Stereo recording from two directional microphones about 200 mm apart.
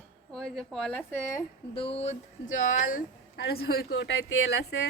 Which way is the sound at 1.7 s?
30° left (ahead or behind).